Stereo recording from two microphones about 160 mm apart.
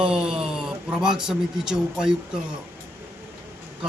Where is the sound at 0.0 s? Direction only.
5° right (ahead or behind).